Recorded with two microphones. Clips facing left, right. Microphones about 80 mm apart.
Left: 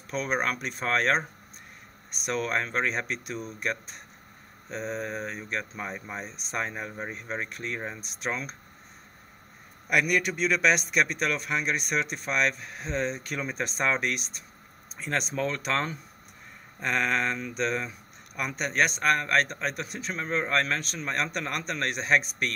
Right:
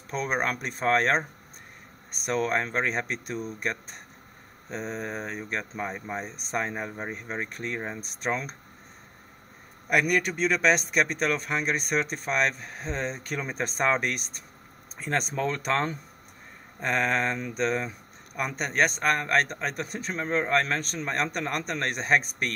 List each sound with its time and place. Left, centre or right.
0.1 s a man's voice: right
2.2 s a man's voice: right
4.8 s speech: centre
5.1 s a man's voice: right
5.6 s speech: centre
7.1 s speech: centre
7.4 s a man's voice: right
9.8 s a man's voice: right